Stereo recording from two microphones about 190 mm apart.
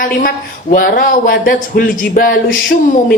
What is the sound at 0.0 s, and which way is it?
Speech, 45° left (ahead or behind).